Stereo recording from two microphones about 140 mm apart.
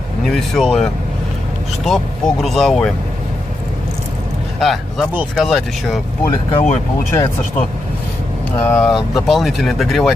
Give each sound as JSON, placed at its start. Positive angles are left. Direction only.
{"t": 0.3, "sound": "speech", "side_deg": 5}
{"t": 1.9, "sound": "speech", "side_deg": 0}
{"t": 4.6, "sound": "speech", "side_deg": 0}
{"t": 6.5, "sound": "speech", "side_deg": 50}
{"t": 8.5, "sound": "speech", "side_deg": 10}
{"t": 8.9, "sound": "speech", "side_deg": 0}